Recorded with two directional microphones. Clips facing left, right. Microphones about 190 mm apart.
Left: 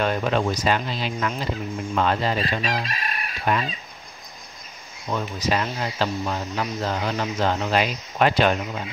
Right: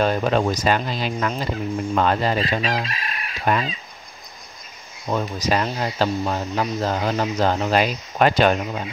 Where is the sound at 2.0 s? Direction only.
45° right (ahead or behind).